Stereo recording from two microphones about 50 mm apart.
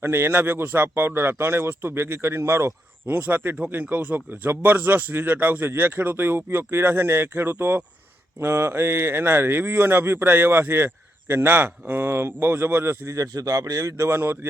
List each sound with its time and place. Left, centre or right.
0.0 s speech: right
3.2 s speech: right